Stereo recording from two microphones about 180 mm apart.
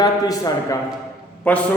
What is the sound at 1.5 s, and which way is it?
Speech, 10° left (ahead or behind).